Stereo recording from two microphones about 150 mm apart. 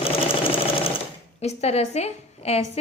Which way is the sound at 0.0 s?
40° left (ahead or behind).